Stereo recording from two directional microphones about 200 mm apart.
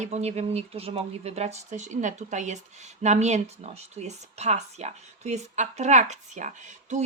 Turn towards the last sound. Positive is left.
turn(degrees=-35)  # may be behind; listen again after turning